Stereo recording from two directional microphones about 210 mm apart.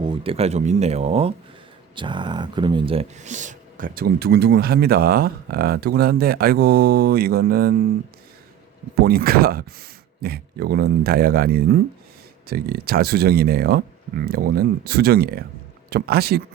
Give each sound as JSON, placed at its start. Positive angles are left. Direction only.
{"t": 0.0, "sound": "speech", "side_deg": -25}
{"t": 9.0, "sound": "speech", "side_deg": -45}